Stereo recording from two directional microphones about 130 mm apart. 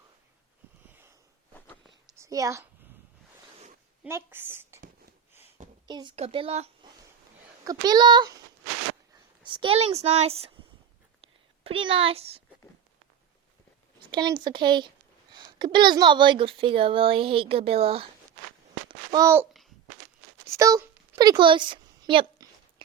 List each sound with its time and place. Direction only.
1.5 s a sound: 10° left (ahead or behind)
2.1 s a woman's voice: 25° right (ahead or behind)
4.1 s a woman's voice: 15° right (ahead or behind)
5.9 s speech: 35° right (ahead or behind)
6.1 s a woman's voice: 45° right (ahead or behind)
7.6 s speech: 30° right (ahead or behind)
9.4 s a woman's voice: 40° right (ahead or behind)
11.2 s whispering: 45° right (ahead or behind)
14.1 s a woman's voice: 35° right (ahead or behind)
18.9 s babbling: 30° right (ahead or behind)
20.5 s a sound: 25° right (ahead or behind)